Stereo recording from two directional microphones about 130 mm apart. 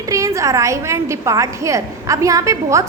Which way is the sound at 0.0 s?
25° right (ahead or behind).